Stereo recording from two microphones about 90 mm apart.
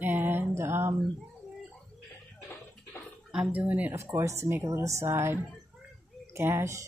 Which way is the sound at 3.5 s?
15° right (ahead or behind).